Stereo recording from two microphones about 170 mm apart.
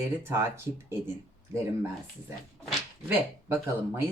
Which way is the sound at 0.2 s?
15° right (ahead or behind).